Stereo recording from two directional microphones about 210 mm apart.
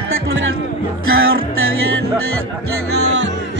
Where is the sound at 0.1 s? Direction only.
70° right (ahead or behind).